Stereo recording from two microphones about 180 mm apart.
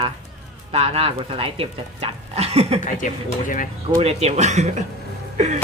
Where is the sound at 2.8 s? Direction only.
45° left (ahead or behind).